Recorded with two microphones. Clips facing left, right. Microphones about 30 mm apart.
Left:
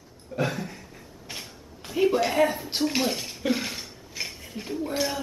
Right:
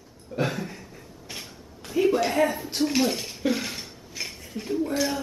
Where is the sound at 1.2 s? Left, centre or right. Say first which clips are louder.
Even; centre.